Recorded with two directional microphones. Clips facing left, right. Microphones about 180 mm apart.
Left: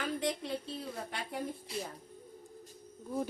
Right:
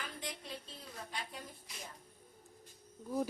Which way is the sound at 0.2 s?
75° left (ahead or behind).